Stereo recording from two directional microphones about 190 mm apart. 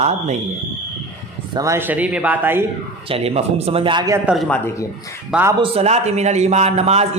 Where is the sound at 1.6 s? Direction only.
10° right (ahead or behind).